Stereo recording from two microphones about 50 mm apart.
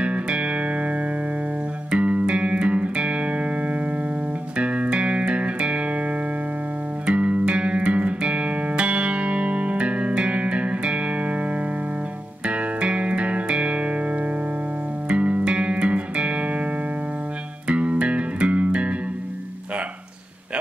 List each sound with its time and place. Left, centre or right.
0.0 s music: right